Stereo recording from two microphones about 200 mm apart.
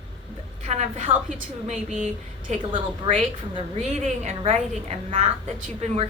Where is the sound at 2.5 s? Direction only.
35° right (ahead or behind).